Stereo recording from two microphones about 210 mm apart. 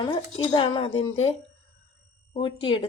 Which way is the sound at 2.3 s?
25° left (ahead or behind).